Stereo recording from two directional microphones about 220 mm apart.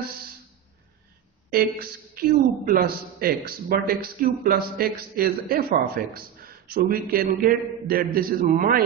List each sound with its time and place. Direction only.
1.5 s a woman's voice: 45° right (ahead or behind)